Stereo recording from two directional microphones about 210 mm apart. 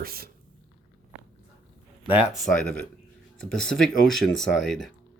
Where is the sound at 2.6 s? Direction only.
5° left (ahead or behind).